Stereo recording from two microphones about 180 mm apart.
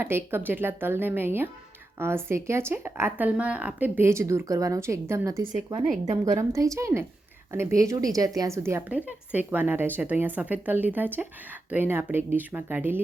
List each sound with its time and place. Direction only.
0.0 s a woman's voice: 10° right (ahead or behind)